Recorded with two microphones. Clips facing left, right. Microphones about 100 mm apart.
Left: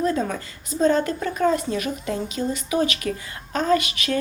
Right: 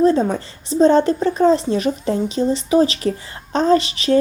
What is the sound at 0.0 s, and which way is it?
A woman's voice, 30° right (ahead or behind).